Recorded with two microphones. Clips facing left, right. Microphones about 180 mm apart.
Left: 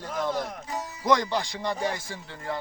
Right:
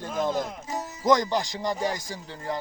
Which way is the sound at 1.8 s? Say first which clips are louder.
Right 1 dB; 40° right (ahead or behind).